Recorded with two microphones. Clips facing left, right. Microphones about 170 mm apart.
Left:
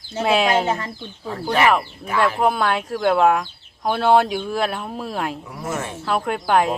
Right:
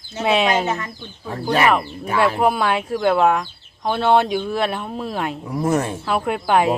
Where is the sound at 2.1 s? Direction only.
5° right (ahead or behind).